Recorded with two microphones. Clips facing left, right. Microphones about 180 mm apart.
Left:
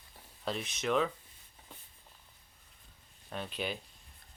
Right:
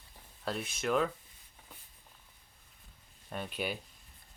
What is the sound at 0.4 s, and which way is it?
Speech, 5° right (ahead or behind).